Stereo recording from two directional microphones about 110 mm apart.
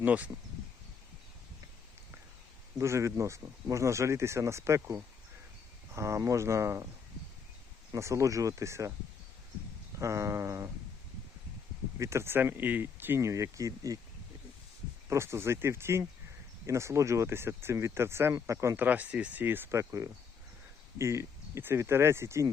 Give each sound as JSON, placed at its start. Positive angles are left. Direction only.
{"t": 0.0, "sound": "speech", "side_deg": -15}
{"t": 2.7, "sound": "speech", "side_deg": -25}
{"t": 7.9, "sound": "speech", "side_deg": -30}
{"t": 10.0, "sound": "speech", "side_deg": -25}
{"t": 11.9, "sound": "speech", "side_deg": -25}
{"t": 15.1, "sound": "speech", "side_deg": -25}
{"t": 18.9, "sound": "speech", "side_deg": -15}